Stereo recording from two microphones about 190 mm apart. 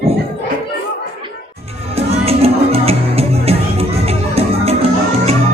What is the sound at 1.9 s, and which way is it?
Music, 30° right (ahead or behind).